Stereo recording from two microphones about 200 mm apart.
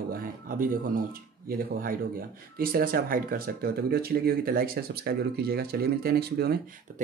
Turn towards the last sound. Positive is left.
turn(degrees=-45)  # may be behind; listen again after turning